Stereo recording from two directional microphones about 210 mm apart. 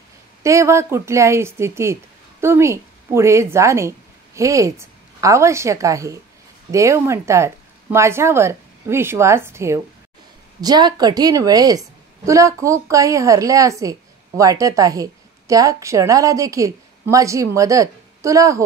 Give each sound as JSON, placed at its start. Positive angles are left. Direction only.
{"t": 0.4, "sound": "a woman's voice", "side_deg": -15}